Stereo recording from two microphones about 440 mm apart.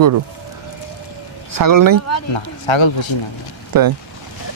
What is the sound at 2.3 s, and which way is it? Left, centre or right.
Speech, left.